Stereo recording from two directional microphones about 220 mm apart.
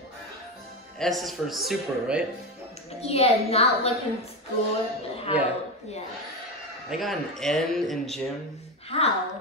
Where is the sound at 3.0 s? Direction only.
30° left (ahead or behind).